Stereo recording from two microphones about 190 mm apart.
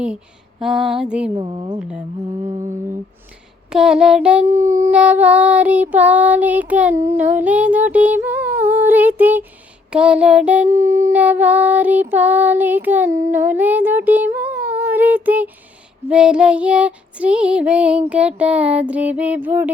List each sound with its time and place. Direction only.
0.6 s female singing: centre (ahead or behind)
1.4 s a woman's voice: 25° right (ahead or behind)
1.8 s female singing: 5° right (ahead or behind)
3.7 s child singing: 5° right (ahead or behind)
13.3 s a sound: 10° right (ahead or behind)
16.0 s child singing: 5° right (ahead or behind)